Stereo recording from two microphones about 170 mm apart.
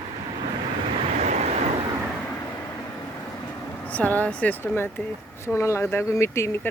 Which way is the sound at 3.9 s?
10° left (ahead or behind).